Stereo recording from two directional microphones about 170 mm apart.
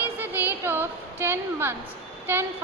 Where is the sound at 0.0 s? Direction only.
10° right (ahead or behind).